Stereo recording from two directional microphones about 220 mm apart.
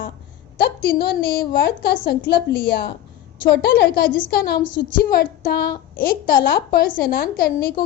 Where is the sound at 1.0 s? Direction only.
45° left (ahead or behind).